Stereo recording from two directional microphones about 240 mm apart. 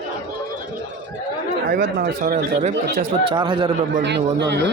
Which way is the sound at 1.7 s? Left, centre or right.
Right.